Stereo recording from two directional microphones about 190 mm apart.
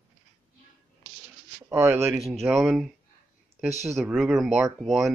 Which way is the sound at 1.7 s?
15° right (ahead or behind).